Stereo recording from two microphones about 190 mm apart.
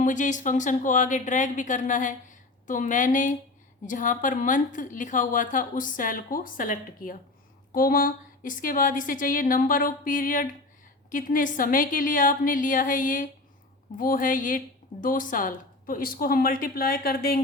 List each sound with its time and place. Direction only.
0.0 s a woman's voice: 40° left (ahead or behind)